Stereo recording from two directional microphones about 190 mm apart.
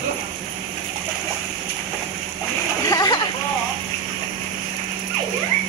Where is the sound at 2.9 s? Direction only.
20° left (ahead or behind).